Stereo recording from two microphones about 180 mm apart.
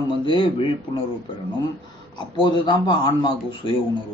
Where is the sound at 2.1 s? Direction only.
25° left (ahead or behind).